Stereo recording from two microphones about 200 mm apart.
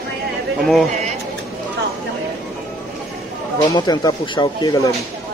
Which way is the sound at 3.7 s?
20° left (ahead or behind).